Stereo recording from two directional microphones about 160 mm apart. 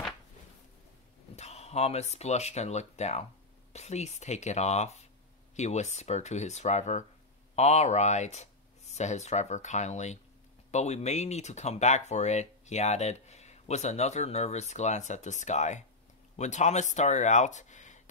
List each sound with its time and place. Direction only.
1.3 s speech: 40° left (ahead or behind)